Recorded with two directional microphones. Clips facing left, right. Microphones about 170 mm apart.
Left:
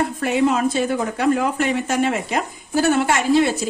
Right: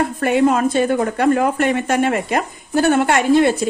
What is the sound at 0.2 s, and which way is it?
Speech, 50° right (ahead or behind).